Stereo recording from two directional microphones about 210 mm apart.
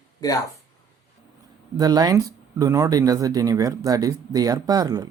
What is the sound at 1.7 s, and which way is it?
Speech, 20° right (ahead or behind).